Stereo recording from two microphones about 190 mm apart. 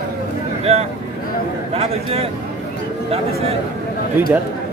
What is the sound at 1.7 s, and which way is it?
Speech, 30° right (ahead or behind).